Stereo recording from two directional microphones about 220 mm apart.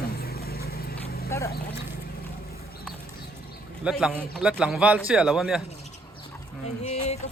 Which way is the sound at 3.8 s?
5° right (ahead or behind).